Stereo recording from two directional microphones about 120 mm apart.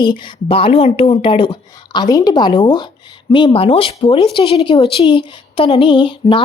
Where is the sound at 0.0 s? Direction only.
40° left (ahead or behind).